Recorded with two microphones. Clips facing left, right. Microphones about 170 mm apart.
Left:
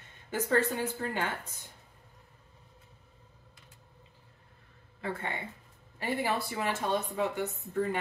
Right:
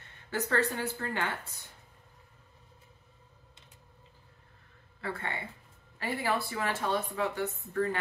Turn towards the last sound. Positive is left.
turn(degrees=15)  # may be behind; listen again after turning